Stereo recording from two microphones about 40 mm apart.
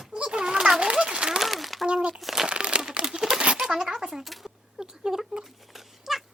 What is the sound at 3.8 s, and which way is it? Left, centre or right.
Speech, centre.